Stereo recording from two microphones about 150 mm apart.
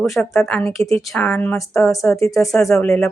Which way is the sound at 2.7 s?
5° left (ahead or behind).